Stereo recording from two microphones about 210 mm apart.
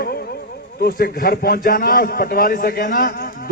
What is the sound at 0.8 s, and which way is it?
A man's voice, 45° left (ahead or behind).